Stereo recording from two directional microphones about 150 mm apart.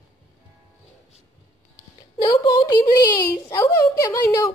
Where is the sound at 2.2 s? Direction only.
25° left (ahead or behind).